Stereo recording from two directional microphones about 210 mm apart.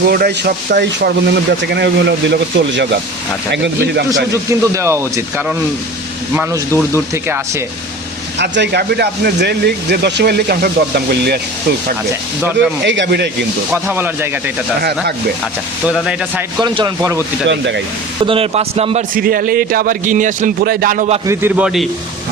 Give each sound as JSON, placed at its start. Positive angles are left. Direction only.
{"t": 0.1, "sound": "a man's voice", "side_deg": -50}
{"t": 4.3, "sound": "speech", "side_deg": -15}
{"t": 8.4, "sound": "speech", "side_deg": -55}
{"t": 12.5, "sound": "a man's voice", "side_deg": -55}
{"t": 13.7, "sound": "speech", "side_deg": -10}
{"t": 14.8, "sound": "speech", "side_deg": -50}
{"t": 15.9, "sound": "a man's voice", "side_deg": -5}
{"t": 16.6, "sound": "speech", "side_deg": -20}
{"t": 18.2, "sound": "speech", "side_deg": -25}
{"t": 19.1, "sound": "a man's voice", "side_deg": -45}
{"t": 21.2, "sound": "a man's voice", "side_deg": -10}